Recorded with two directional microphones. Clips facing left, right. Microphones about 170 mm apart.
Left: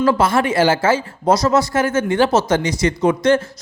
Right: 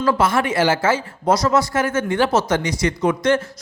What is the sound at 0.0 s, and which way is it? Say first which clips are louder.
A man's voice: left 3 dB; 30° left (ahead or behind).